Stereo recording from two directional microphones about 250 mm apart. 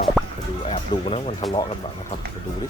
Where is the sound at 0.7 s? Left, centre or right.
Left.